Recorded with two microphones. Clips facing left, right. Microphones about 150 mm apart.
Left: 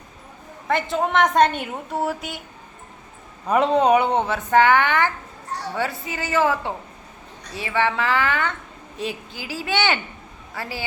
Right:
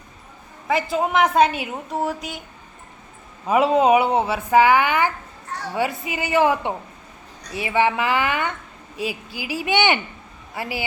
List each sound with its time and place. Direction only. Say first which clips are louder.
0.7 s a woman's voice: right 1 dB; 5° right (ahead or behind)
3.4 s speech: right 1 dB; 5° right (ahead or behind)